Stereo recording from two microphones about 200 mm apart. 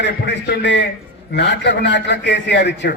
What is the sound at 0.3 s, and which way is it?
A man's voice, 60° left (ahead or behind).